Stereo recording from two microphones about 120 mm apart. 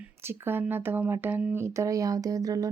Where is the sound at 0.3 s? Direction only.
20° right (ahead or behind).